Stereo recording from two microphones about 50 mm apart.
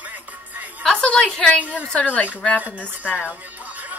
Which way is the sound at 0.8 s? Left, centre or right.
Centre.